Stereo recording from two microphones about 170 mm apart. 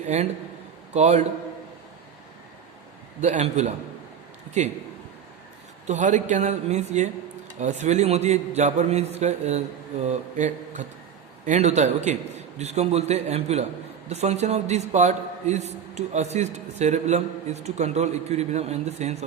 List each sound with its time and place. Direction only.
0.0 s a man's voice: 40° right (ahead or behind)
3.2 s a man's voice: 40° right (ahead or behind)
5.8 s a man's voice: 45° right (ahead or behind)